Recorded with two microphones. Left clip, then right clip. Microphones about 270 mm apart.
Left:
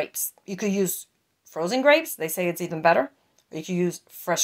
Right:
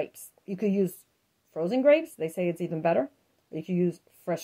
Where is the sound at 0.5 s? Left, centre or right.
Centre.